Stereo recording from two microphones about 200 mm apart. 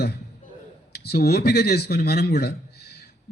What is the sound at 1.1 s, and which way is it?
A man's voice, 50° left (ahead or behind).